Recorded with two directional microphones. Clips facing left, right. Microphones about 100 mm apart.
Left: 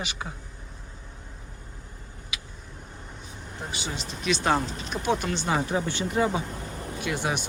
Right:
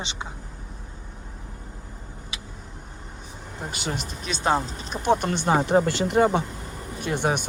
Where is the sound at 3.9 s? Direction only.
55° right (ahead or behind).